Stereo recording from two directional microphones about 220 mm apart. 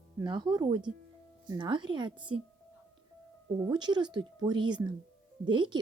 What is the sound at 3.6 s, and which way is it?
Speech, 20° right (ahead or behind).